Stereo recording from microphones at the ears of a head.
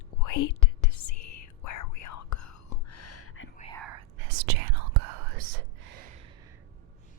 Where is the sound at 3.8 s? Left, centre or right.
Right.